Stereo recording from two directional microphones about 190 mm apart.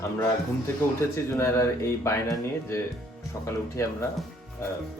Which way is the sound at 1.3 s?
15° left (ahead or behind).